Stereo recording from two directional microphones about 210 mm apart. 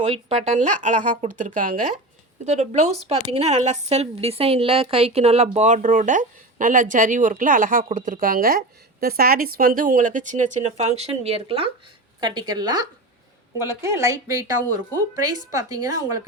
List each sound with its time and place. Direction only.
0.0 s a woman's voice: 30° right (ahead or behind); by 14.4 s 15° right (ahead or behind)
15.7 s speech: 15° right (ahead or behind)